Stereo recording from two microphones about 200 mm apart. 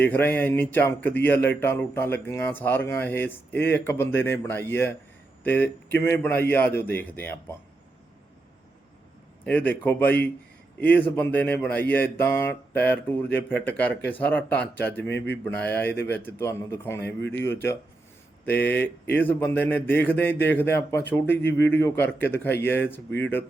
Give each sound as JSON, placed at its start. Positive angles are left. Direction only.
{"t": 0.0, "sound": "speech", "side_deg": 10}
{"t": 9.5, "sound": "a man's voice", "side_deg": 10}
{"t": 15.0, "sound": "speech", "side_deg": 60}
{"t": 15.4, "sound": "speech", "side_deg": 10}